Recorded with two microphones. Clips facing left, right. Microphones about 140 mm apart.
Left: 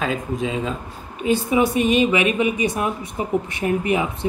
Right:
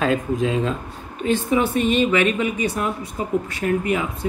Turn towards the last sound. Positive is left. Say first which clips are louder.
# left 1 dB
turn(degrees=20)  # may be behind; listen again after turning